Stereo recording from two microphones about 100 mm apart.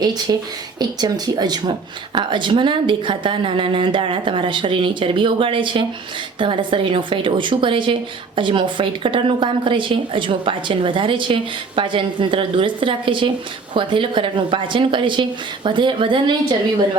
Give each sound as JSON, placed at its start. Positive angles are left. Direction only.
{"t": 0.0, "sound": "a woman's voice", "side_deg": -45}